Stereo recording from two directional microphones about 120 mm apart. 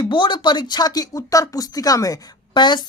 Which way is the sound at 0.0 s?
40° left (ahead or behind).